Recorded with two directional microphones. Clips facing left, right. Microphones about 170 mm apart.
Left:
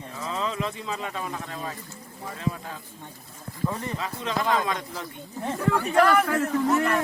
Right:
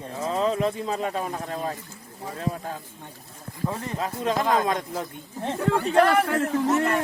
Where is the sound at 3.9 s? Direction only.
45° right (ahead or behind).